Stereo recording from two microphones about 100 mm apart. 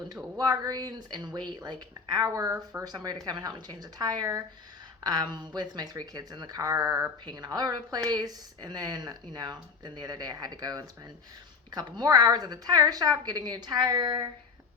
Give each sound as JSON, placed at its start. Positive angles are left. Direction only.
{"t": 0.3, "sound": "a woman's voice", "side_deg": -40}
{"t": 7.3, "sound": "speech", "side_deg": -45}